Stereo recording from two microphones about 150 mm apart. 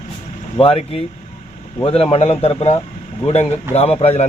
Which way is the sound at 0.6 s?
40° left (ahead or behind).